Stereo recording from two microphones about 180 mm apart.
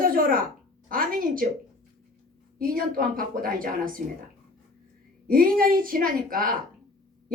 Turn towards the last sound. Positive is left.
turn(degrees=-50)  # may be behind; listen again after turning